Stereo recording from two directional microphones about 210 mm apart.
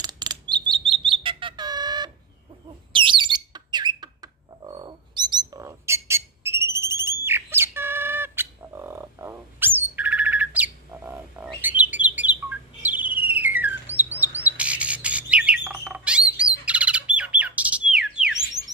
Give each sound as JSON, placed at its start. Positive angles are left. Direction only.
{"t": 0.0, "sound": "bird", "side_deg": -20}
{"t": 2.9, "sound": "a sound", "side_deg": -25}
{"t": 13.3, "sound": "bird", "side_deg": -10}